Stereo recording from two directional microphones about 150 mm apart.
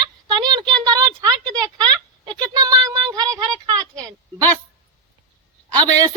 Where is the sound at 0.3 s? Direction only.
30° right (ahead or behind).